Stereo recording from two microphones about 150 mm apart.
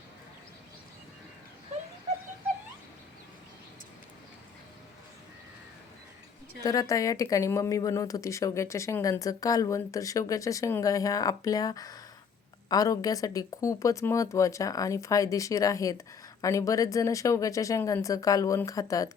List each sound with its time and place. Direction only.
6.6 s speech: 25° left (ahead or behind)